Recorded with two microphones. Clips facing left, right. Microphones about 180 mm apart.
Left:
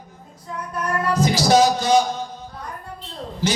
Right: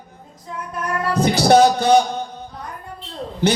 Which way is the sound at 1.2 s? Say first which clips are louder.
Right 4 dB; 60° right (ahead or behind).